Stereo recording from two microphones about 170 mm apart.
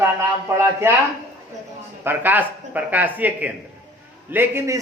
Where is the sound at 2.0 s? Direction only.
10° right (ahead or behind).